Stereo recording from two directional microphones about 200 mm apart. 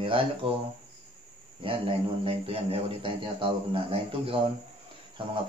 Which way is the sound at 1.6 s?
25° right (ahead or behind).